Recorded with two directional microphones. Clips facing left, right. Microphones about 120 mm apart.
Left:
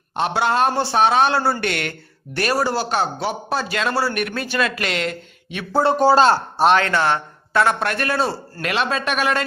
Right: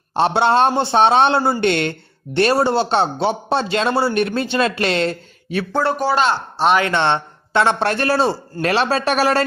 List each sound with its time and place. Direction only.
0.1 s speech: 30° right (ahead or behind)
5.8 s speech: 30° left (ahead or behind)
6.7 s a man's voice: 15° right (ahead or behind); by 9.4 s 35° right (ahead or behind)